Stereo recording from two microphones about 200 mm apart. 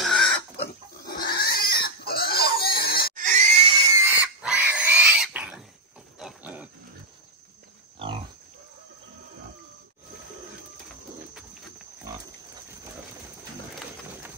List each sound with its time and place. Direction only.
0.0 s chicken: centre (ahead or behind)
1.0 s pig: 50° left (ahead or behind)
3.2 s pig: 40° right (ahead or behind)
3.8 s pig: 15° right (ahead or behind)
6.1 s wild animals: 5° right (ahead or behind)